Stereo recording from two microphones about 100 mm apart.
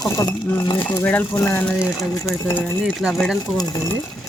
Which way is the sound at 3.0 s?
5° left (ahead or behind).